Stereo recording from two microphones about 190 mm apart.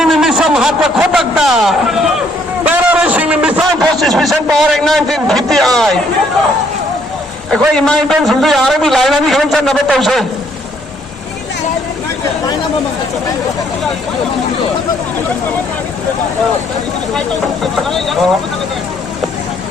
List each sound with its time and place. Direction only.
0.0 s speech: centre (ahead or behind)
2.6 s a sound: 5° right (ahead or behind)
4.0 s a man's voice: centre (ahead or behind)
7.5 s a man's voice: 5° left (ahead or behind)
17.2 s a man's voice: centre (ahead or behind)